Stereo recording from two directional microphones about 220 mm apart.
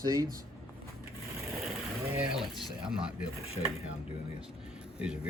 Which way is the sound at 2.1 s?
5° right (ahead or behind).